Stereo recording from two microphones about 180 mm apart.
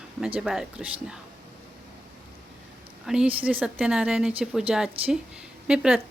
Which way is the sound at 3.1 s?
5° right (ahead or behind).